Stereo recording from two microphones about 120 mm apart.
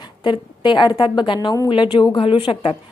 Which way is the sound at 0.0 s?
40° left (ahead or behind).